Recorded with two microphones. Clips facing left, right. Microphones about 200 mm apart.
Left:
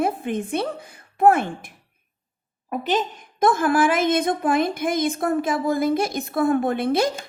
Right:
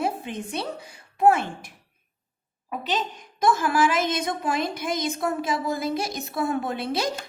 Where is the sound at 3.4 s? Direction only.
55° left (ahead or behind).